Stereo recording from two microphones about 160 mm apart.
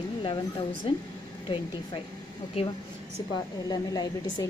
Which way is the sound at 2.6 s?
35° left (ahead or behind).